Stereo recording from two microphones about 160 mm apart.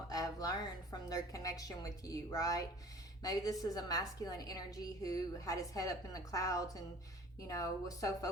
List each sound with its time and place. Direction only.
0.1 s a woman's voice: 20° left (ahead or behind)